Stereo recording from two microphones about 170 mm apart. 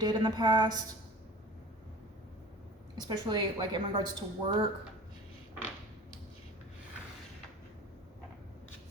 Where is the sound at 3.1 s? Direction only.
25° right (ahead or behind).